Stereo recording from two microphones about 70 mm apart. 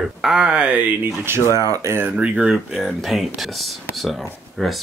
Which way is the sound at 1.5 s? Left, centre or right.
Right.